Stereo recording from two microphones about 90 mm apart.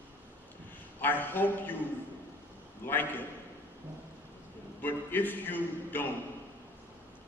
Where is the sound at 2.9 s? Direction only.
20° left (ahead or behind).